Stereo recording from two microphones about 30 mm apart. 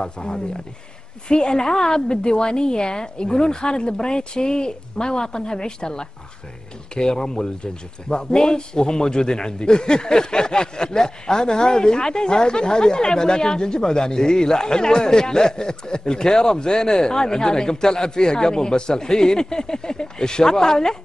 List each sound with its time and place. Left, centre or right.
0.0 s a man's voice: left